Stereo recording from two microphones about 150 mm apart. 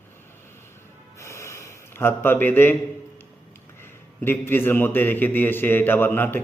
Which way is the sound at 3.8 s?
15° left (ahead or behind).